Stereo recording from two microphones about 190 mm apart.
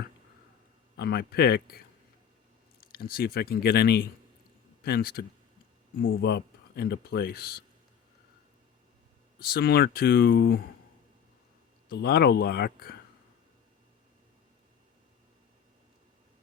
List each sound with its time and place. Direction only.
0.9 s speech: 55° left (ahead or behind)
2.9 s speech: 50° left (ahead or behind)
9.4 s speech: 55° left (ahead or behind)
11.9 s speech: 55° left (ahead or behind)